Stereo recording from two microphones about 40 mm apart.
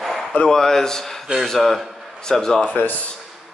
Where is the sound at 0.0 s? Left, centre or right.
Centre.